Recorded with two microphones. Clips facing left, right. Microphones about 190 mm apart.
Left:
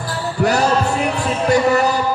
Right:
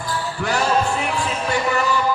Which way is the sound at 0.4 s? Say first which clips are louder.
Left 4 dB; 40° left (ahead or behind).